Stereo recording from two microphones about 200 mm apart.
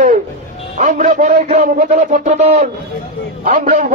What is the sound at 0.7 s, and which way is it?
Speech, 40° right (ahead or behind).